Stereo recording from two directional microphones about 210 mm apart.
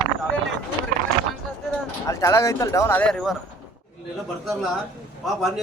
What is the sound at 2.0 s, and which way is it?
Speech, 15° left (ahead or behind).